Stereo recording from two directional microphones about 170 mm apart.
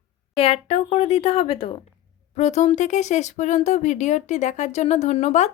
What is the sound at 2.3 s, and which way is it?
Speech, 40° left (ahead or behind).